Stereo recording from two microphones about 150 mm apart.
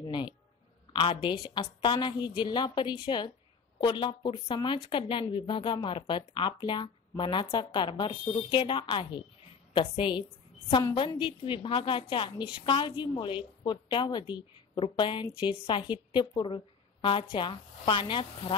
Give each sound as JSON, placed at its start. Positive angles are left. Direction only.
{"t": 0.0, "sound": "music", "side_deg": 30}
{"t": 0.9, "sound": "a woman's voice", "side_deg": 35}